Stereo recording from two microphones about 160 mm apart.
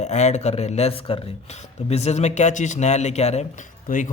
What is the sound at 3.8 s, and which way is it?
Speech, 55° left (ahead or behind).